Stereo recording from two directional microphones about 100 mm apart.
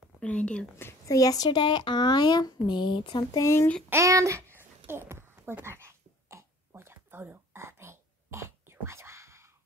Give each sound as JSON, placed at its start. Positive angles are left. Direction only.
{"t": 0.2, "sound": "speech", "side_deg": 10}
{"t": 0.7, "sound": "a child's voice", "side_deg": 30}
{"t": 3.3, "sound": "speech", "side_deg": 30}
{"t": 3.9, "sound": "babbling", "side_deg": -30}